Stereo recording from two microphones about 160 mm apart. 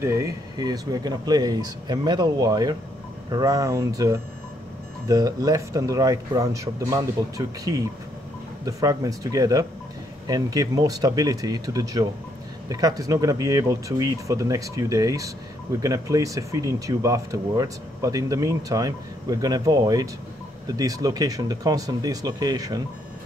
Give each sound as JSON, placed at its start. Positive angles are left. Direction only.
{"t": 0.0, "sound": "speech", "side_deg": -20}